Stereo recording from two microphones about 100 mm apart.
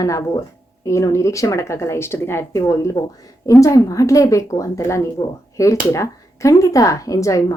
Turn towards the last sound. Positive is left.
turn(degrees=35)  # may be behind; listen again after turning